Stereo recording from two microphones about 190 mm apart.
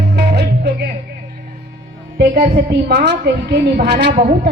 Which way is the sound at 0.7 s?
65° right (ahead or behind).